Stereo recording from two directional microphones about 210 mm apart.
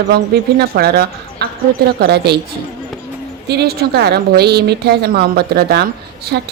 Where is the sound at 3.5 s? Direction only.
50° right (ahead or behind).